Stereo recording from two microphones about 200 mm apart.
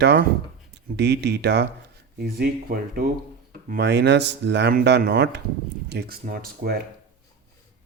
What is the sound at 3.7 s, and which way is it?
A man's voice, 55° right (ahead or behind).